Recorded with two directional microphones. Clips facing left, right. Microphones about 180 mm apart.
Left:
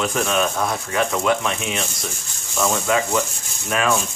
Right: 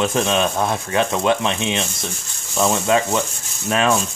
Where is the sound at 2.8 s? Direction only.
25° right (ahead or behind).